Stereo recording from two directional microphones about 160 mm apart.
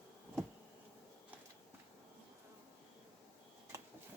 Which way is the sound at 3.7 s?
20° right (ahead or behind).